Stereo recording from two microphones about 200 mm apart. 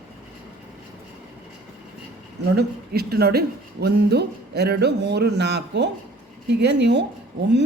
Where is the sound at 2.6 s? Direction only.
50° right (ahead or behind).